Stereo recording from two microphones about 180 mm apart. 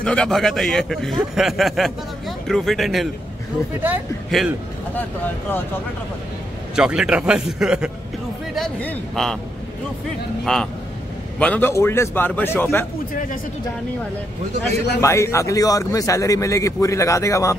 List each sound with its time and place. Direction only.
0.0 s a man's voice: 5° left (ahead or behind)
4.3 s a man's voice: centre (ahead or behind)
4.9 s a man's voice: 10° left (ahead or behind)
6.7 s a man's voice: 5° right (ahead or behind)
10.4 s a man's voice: centre (ahead or behind)
15.0 s a man's voice: 15° left (ahead or behind)